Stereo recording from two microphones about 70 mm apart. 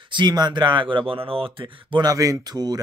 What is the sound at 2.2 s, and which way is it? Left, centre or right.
Speech, right.